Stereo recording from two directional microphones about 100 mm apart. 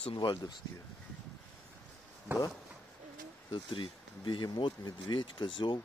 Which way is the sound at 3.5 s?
60° left (ahead or behind).